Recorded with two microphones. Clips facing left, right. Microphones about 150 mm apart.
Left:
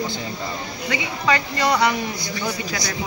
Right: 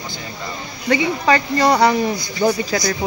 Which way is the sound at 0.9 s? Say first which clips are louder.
Right 6 dB; 35° right (ahead or behind).